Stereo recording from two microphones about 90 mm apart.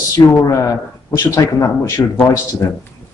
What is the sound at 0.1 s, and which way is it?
A man's voice, 35° left (ahead or behind).